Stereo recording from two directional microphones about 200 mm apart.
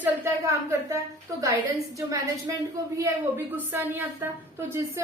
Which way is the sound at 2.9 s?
10° right (ahead or behind).